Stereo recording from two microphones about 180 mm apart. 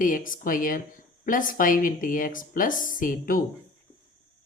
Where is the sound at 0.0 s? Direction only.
50° left (ahead or behind).